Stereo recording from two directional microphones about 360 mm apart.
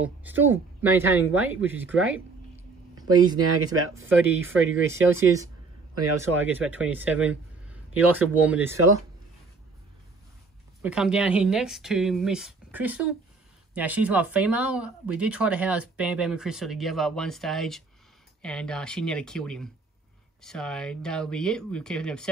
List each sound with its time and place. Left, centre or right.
0.0 s speech: centre
3.3 s speech: right
5.1 s speech: centre
10.8 s speech: centre